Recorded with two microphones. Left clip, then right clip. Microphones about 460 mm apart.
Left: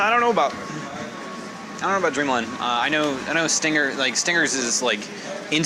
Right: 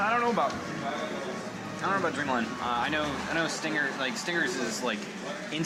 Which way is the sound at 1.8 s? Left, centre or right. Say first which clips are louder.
Left 7 dB; left.